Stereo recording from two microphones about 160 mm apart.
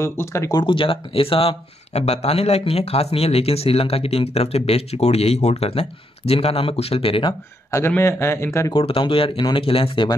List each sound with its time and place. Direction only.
0.0 s speech: 15° left (ahead or behind); by 7.3 s 35° left (ahead or behind)
7.7 s speech: 15° left (ahead or behind)
8.7 s speech: 35° left (ahead or behind)